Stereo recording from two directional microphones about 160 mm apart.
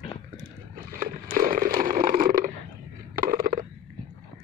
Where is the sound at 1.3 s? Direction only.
60° right (ahead or behind).